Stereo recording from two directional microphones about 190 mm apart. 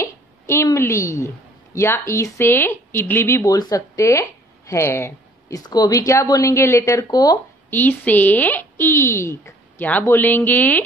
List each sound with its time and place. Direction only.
0.0 s a woman's voice: 15° left (ahead or behind)